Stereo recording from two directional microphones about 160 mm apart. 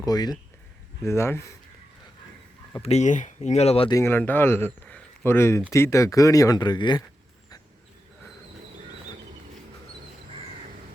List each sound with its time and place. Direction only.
0.0 s speech: 25° left (ahead or behind)
2.8 s speech: 45° left (ahead or behind)
3.8 s speech: 20° left (ahead or behind)